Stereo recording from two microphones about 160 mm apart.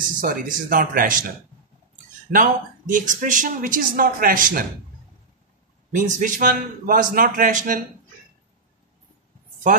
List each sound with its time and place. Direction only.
0.2 s speech: 60° right (ahead or behind)
2.3 s speech: 55° right (ahead or behind)
5.9 s speech: 50° right (ahead or behind)